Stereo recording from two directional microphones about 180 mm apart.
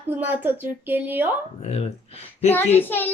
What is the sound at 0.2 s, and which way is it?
Speech, 10° right (ahead or behind).